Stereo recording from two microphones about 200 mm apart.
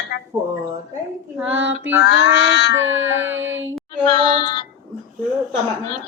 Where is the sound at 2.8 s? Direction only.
75° right (ahead or behind).